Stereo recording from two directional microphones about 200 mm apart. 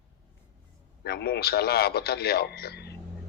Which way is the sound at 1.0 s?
55° left (ahead or behind).